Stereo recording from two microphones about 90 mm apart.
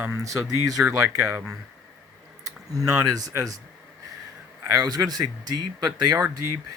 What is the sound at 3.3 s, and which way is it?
Speech, 40° right (ahead or behind).